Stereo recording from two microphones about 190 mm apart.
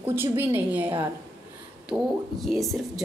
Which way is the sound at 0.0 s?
10° right (ahead or behind).